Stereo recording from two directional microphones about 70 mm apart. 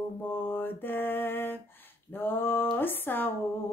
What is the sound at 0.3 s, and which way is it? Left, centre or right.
Mantra, left.